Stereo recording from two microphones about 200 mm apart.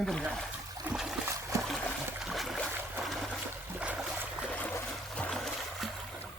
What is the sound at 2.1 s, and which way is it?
Boat, centre (ahead or behind).